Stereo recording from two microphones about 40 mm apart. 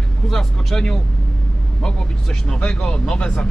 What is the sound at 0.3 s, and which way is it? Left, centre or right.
Speech, centre.